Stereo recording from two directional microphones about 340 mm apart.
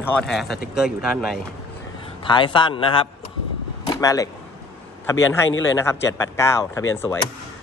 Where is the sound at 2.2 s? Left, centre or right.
Centre.